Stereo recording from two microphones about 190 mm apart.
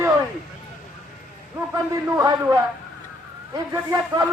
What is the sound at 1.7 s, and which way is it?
Speech, 15° right (ahead or behind).